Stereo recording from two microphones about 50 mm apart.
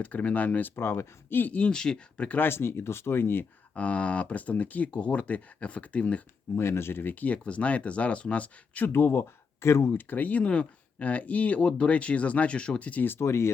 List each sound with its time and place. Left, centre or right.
0.0 s speech: left
0.8 s speech: left
1.3 s speech: left
1.7 s speech: centre
2.1 s speech: left
2.4 s speech: left
3.8 s speech: left
6.6 s speech: left
7.4 s speech: left
8.9 s speech: left
10.0 s speech: left
13.1 s speech: left